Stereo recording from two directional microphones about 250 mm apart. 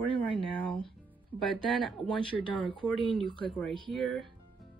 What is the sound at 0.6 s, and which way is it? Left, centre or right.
Speech, centre.